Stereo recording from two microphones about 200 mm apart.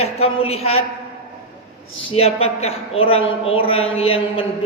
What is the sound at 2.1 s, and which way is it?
A man's voice, 30° left (ahead or behind).